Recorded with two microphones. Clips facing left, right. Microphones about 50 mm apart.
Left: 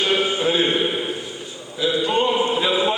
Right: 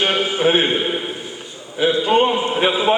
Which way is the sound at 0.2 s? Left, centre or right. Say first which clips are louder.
Right 3 dB; right.